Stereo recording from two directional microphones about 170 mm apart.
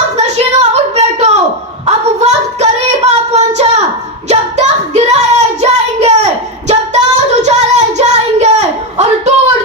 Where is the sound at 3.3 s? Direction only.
40° right (ahead or behind).